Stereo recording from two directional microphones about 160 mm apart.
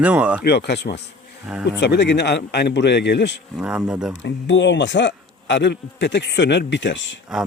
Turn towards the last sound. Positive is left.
turn(degrees=0)  # may be behind; listen again after turning